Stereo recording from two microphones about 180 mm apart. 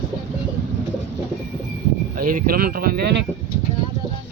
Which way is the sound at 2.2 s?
50° right (ahead or behind).